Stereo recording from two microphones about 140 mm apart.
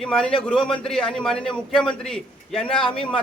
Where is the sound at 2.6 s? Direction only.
40° left (ahead or behind).